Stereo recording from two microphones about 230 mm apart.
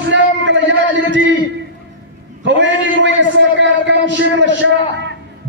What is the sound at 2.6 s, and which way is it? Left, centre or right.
A man's voice, right.